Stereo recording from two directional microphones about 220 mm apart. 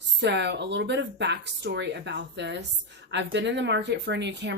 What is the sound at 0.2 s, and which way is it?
Speech, 50° right (ahead or behind).